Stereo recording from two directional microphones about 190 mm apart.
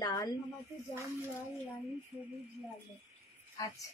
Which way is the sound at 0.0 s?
20° left (ahead or behind).